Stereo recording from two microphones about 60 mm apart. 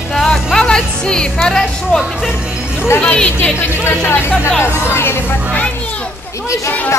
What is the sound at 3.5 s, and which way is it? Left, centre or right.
Speech, left.